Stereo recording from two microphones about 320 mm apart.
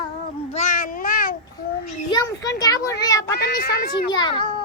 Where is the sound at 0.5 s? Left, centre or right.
Left.